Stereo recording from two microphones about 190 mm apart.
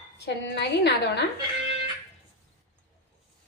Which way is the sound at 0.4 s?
60° left (ahead or behind).